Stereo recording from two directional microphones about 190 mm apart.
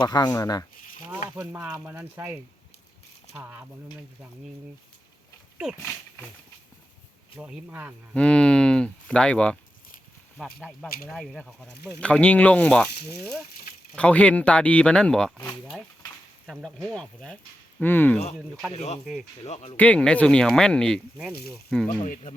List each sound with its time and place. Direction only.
0.0 s speech: 20° left (ahead or behind)
1.4 s speech: 15° right (ahead or behind)
5.7 s speech: 10° left (ahead or behind)
7.3 s speech: 5° right (ahead or behind)
8.1 s speech: 5° left (ahead or behind)
10.6 s speech: centre (ahead or behind)
13.9 s speech: 5° left (ahead or behind)
18.7 s speech: 35° left (ahead or behind)
19.7 s speech: 5° left (ahead or behind)
21.8 s speech: 45° left (ahead or behind)